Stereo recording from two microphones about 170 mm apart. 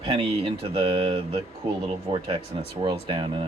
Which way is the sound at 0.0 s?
35° right (ahead or behind).